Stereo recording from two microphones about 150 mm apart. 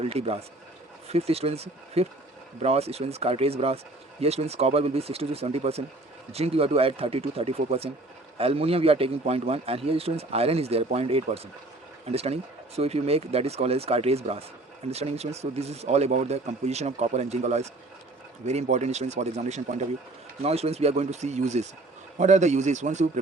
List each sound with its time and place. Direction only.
0.0 s a man's voice: 40° right (ahead or behind)